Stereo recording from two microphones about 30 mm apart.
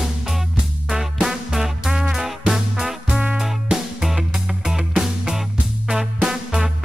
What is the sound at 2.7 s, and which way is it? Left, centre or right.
Music, right.